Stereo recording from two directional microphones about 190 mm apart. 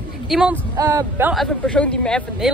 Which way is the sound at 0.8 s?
15° right (ahead or behind).